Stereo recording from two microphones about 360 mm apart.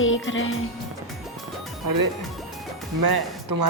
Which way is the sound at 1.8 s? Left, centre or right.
Right.